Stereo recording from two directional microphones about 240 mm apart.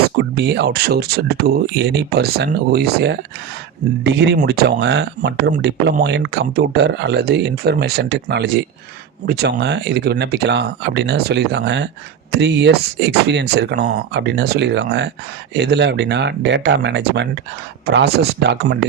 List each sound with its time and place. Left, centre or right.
0.2 s speech: right